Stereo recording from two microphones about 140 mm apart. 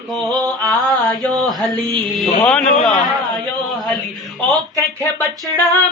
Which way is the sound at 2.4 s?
5° left (ahead or behind).